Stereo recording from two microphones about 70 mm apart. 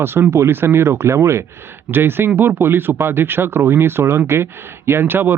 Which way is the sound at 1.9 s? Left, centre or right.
Right.